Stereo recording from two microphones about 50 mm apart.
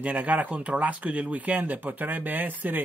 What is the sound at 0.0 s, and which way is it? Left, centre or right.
Speech, right.